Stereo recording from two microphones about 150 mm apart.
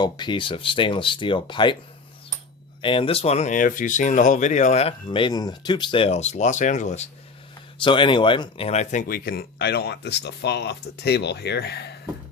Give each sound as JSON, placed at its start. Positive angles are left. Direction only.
{"t": 0.0, "sound": "speech", "side_deg": 30}
{"t": 2.8, "sound": "speech", "side_deg": 35}
{"t": 7.8, "sound": "speech", "side_deg": 35}